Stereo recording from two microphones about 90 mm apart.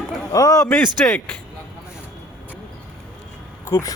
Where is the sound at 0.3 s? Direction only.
40° left (ahead or behind).